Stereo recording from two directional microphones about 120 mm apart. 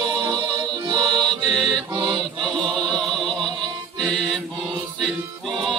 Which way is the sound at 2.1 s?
5° left (ahead or behind).